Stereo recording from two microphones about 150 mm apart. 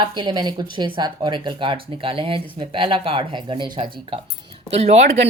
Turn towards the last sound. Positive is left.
turn(degrees=-45)  # may be behind; listen again after turning